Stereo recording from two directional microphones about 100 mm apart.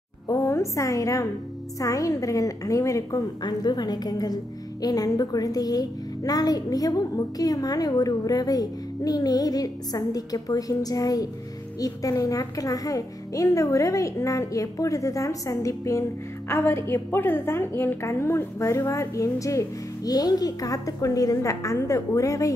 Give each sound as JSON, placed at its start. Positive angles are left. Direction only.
{"t": 0.3, "sound": "a woman's voice", "side_deg": 30}